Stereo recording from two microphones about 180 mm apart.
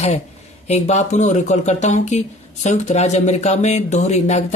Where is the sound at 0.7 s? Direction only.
40° left (ahead or behind).